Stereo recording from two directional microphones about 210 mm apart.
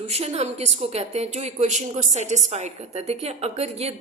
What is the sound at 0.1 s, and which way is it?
A woman's voice, 30° right (ahead or behind).